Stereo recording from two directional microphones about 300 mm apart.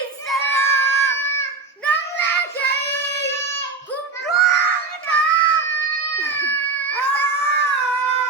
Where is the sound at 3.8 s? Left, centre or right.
Centre.